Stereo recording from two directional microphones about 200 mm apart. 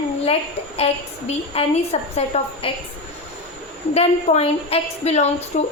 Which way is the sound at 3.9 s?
30° left (ahead or behind).